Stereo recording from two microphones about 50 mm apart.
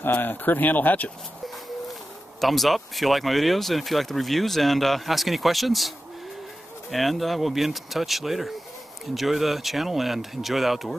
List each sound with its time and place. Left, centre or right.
0.0 s speech: left
2.4 s speech: centre